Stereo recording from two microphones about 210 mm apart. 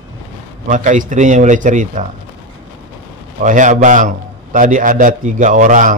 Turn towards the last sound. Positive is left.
turn(degrees=-35)  # may be behind; listen again after turning